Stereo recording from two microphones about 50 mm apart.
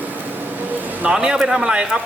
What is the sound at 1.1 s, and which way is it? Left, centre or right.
Speech, centre.